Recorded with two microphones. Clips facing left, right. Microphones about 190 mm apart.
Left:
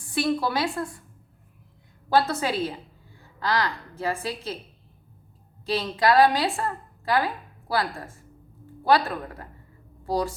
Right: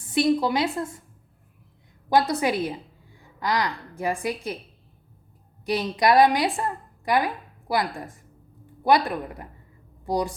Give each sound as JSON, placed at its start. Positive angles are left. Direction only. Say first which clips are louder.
{"t": 0.1, "sound": "a woman's voice", "louder": "right 4 dB", "side_deg": -20}
{"t": 2.0, "sound": "a woman's voice", "louder": "right 2 dB", "side_deg": -15}
{"t": 5.6, "sound": "a woman's voice", "louder": "right 1 dB", "side_deg": -15}